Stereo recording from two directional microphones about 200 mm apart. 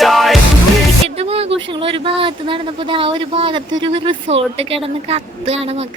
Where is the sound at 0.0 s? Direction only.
Centre (ahead or behind).